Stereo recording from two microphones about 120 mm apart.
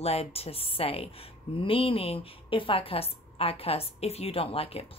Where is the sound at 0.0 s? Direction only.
55° left (ahead or behind).